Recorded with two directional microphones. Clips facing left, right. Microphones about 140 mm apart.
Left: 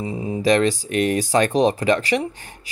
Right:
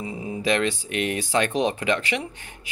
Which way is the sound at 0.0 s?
35° left (ahead or behind).